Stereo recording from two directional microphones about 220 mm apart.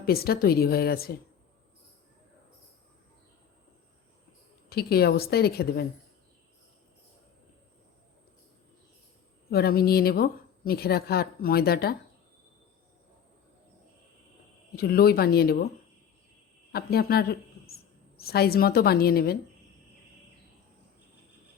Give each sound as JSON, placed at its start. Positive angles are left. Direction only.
{"t": 0.0, "sound": "speech", "side_deg": 45}
{"t": 4.7, "sound": "speech", "side_deg": 45}
{"t": 9.5, "sound": "speech", "side_deg": 45}
{"t": 14.8, "sound": "speech", "side_deg": 45}
{"t": 16.7, "sound": "a woman's voice", "side_deg": 45}